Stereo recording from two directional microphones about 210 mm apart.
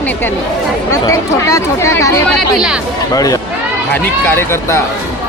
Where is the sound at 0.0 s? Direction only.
10° left (ahead or behind).